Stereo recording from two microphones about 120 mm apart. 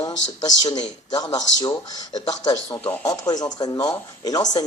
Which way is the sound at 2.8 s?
10° left (ahead or behind).